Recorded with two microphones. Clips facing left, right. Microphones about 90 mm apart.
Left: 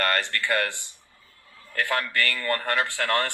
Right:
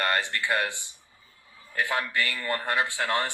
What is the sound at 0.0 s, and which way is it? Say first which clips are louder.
A man's voice: left 1 dB; 15° right (ahead or behind).